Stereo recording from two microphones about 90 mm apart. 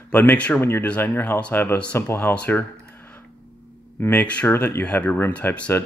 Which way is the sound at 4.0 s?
20° left (ahead or behind).